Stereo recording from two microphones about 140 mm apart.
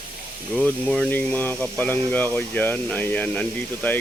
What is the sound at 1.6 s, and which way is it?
Speech, 10° left (ahead or behind).